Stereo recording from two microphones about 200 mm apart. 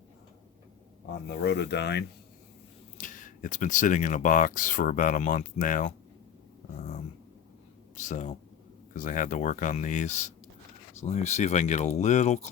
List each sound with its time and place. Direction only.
1.3 s speech: 55° left (ahead or behind)
3.0 s speech: 40° left (ahead or behind)
7.9 s speech: 35° left (ahead or behind)